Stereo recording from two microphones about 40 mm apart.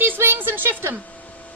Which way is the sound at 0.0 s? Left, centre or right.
Right.